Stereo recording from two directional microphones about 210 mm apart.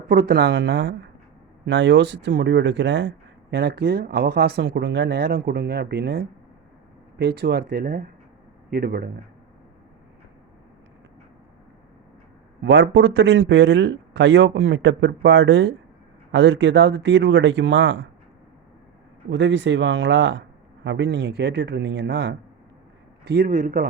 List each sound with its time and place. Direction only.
0.1 s speech: 45° right (ahead or behind)
12.6 s speech: 60° right (ahead or behind)
19.3 s speech: 60° right (ahead or behind); by 23.9 s 40° right (ahead or behind)